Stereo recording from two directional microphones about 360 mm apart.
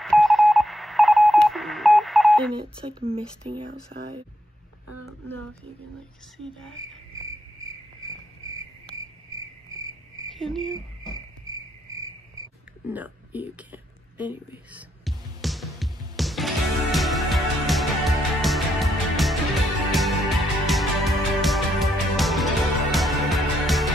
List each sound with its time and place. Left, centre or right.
0.0 s telephone dialing: centre
2.8 s speech: centre
5.0 s speech: centre
10.3 s speech: centre
11.9 s cricket: centre
12.8 s a sound: centre
19.9 s music: centre